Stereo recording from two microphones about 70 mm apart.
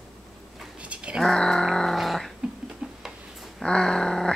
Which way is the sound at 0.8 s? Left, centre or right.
Centre.